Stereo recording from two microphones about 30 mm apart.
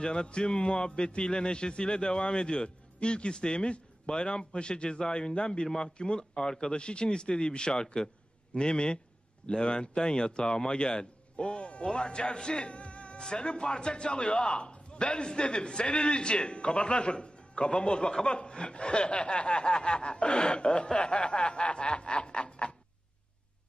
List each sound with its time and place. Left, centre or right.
0.0 s a man's voice: left
6.3 s a man's voice: left